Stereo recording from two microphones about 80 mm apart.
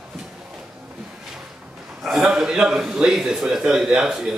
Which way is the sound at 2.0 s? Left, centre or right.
Centre.